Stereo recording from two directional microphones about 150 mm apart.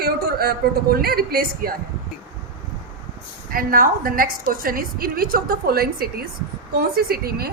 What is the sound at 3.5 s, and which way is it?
A woman's voice, 75° right (ahead or behind).